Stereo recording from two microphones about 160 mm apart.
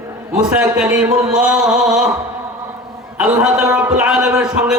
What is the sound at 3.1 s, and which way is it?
A man's voice, 10° right (ahead or behind).